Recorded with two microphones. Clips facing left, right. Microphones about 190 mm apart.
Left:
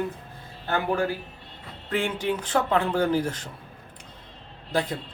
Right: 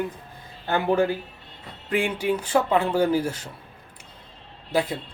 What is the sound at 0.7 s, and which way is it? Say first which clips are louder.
Speech: right 4 dB; 20° right (ahead or behind).